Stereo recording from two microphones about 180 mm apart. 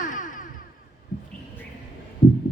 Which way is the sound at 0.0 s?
45° left (ahead or behind).